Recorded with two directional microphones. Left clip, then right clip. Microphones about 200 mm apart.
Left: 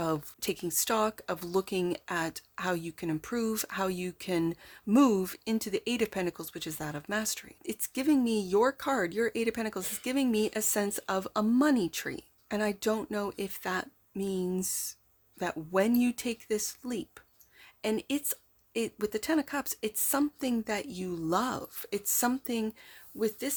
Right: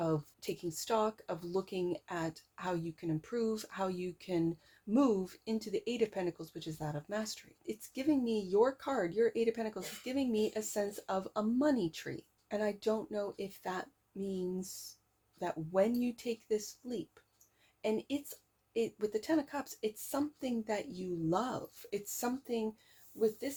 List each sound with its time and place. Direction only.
0.0 s speech: 40° left (ahead or behind)